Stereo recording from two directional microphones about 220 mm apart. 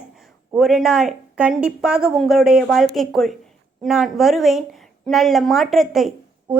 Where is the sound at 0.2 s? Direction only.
Centre (ahead or behind).